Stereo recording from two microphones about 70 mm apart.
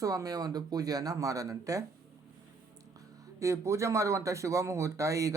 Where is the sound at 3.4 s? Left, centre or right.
Right.